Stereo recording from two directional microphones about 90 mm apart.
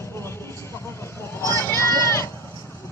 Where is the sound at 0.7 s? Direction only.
30° left (ahead or behind).